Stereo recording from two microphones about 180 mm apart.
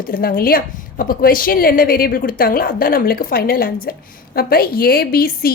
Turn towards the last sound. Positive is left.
turn(degrees=55)  # may be behind; listen again after turning